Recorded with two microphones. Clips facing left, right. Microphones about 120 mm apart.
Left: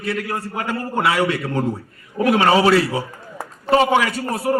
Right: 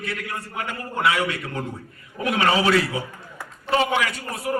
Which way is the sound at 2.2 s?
40° left (ahead or behind).